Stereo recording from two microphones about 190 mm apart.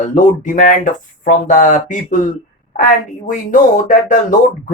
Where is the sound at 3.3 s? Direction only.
40° left (ahead or behind).